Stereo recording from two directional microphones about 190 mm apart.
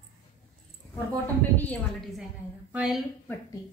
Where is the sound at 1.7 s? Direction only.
Centre (ahead or behind).